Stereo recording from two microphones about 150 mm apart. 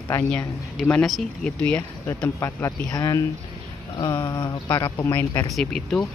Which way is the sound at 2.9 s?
25° left (ahead or behind).